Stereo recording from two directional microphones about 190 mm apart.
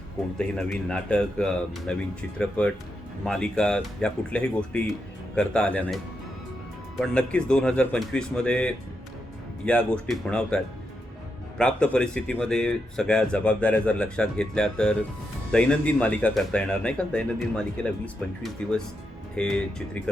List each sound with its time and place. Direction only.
0.3 s speech: 5° left (ahead or behind)
7.0 s speech: 5° left (ahead or behind)